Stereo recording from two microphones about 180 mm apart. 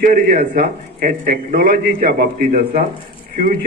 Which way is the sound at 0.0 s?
50° right (ahead or behind).